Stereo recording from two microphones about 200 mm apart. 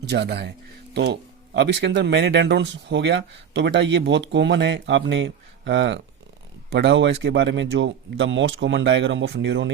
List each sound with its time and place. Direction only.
0.1 s speech: 55° right (ahead or behind)